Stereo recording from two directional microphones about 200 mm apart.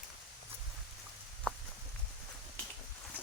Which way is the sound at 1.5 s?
Centre (ahead or behind).